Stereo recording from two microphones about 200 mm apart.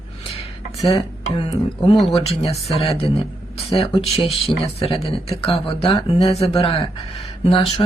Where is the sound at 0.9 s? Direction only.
30° left (ahead or behind).